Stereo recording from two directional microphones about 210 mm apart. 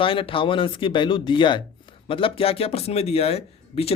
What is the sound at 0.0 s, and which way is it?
Speech, 25° left (ahead or behind).